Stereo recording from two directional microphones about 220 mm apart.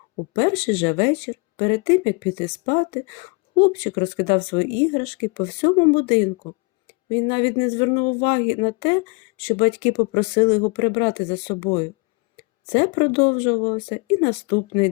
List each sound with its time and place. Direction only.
0.3 s speech: 25° left (ahead or behind)